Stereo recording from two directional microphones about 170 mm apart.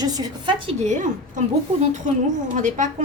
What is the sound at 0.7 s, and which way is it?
Speech, 45° right (ahead or behind).